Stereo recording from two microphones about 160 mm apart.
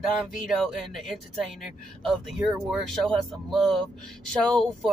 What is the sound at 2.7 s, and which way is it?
Speech, centre (ahead or behind).